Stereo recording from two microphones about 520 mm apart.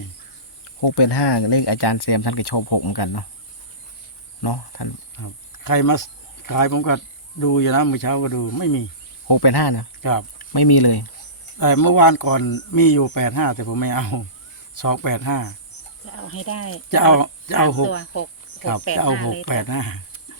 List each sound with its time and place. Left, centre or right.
0.8 s speech: left
4.4 s speech: left
16.0 s speech: left
16.9 s speech: left
17.8 s speech: left
19.5 s speech: left